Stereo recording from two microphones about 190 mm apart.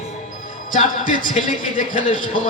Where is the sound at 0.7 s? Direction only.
45° left (ahead or behind).